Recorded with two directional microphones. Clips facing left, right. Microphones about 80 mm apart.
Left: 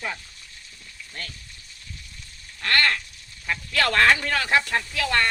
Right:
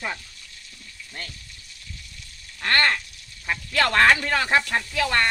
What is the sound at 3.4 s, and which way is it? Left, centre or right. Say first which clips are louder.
Speech: right 1 dB; right.